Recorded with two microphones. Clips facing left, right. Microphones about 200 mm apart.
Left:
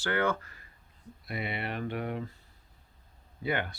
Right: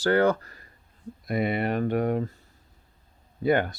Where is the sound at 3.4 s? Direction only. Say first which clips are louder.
Right 9 dB; 45° right (ahead or behind).